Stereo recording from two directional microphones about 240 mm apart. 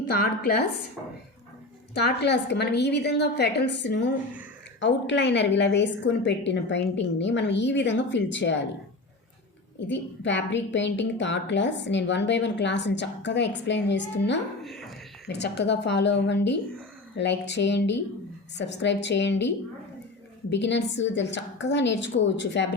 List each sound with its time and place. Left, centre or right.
0.2 s a woman's voice: left
1.9 s a woman's voice: left
9.7 s a woman's voice: left
14.6 s a sound: centre
15.3 s a woman's voice: left